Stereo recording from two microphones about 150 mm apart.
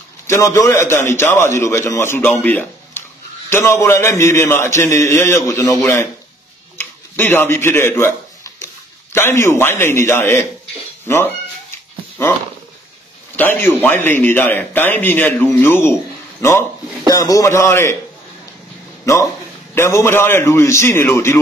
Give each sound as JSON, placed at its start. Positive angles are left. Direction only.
{"t": 0.3, "sound": "a man's voice", "side_deg": 20}
{"t": 6.8, "sound": "a sound", "side_deg": 15}
{"t": 9.1, "sound": "a man's voice", "side_deg": 15}
{"t": 13.4, "sound": "a man's voice", "side_deg": 15}
{"t": 19.7, "sound": "a man's voice", "side_deg": 20}